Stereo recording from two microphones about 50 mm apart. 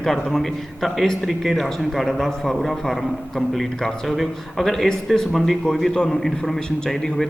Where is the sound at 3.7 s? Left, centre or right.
Centre.